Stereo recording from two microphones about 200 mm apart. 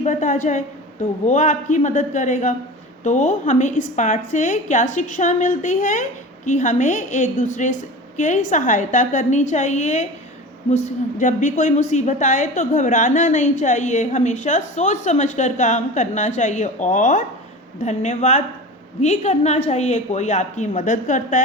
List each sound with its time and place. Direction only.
0.0 s a woman's voice: 40° left (ahead or behind)